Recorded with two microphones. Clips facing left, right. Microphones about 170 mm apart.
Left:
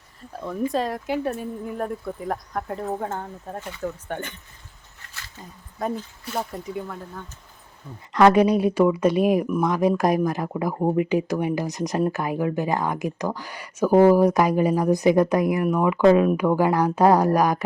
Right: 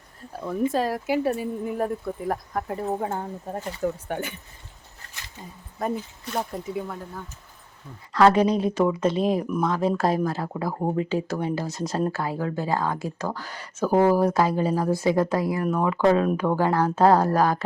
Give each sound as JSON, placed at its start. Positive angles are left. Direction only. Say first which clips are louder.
{"t": 0.2, "sound": "speech", "louder": "right 1 dB", "side_deg": -5}
{"t": 5.0, "sound": "a sound", "louder": "left 2 dB", "side_deg": -35}
{"t": 5.8, "sound": "speech", "louder": "even", "side_deg": 0}
{"t": 8.1, "sound": "speech", "louder": "left 2 dB", "side_deg": 15}